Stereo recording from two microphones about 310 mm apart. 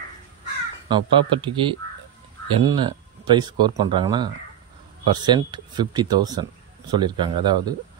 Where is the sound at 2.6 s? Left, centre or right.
Centre.